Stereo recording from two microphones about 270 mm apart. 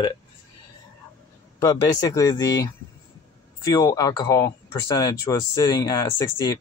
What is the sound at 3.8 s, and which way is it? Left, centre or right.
Speech, centre.